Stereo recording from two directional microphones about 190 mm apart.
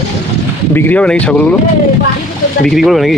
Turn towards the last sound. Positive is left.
turn(degrees=0)  # may be behind; listen again after turning